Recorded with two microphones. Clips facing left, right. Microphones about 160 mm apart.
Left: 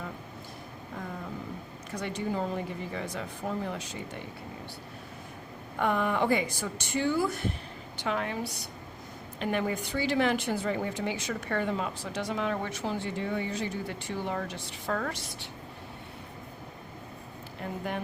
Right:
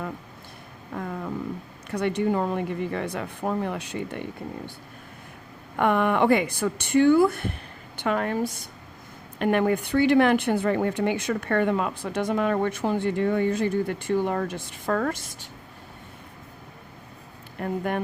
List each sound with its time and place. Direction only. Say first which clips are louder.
1.9 s speech: right 9 dB; 60° right (ahead or behind)
5.7 s a woman's voice: right 6 dB; 65° right (ahead or behind); by 8.6 s 50° right (ahead or behind)
9.4 s speech: right 8 dB; 60° right (ahead or behind)
17.6 s speech: right 7 dB; 55° right (ahead or behind)